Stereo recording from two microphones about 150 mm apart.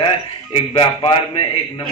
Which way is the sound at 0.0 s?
35° left (ahead or behind).